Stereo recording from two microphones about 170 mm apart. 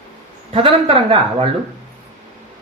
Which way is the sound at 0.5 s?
35° right (ahead or behind).